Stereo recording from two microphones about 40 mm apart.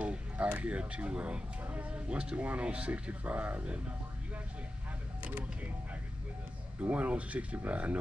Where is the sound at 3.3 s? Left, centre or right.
Right.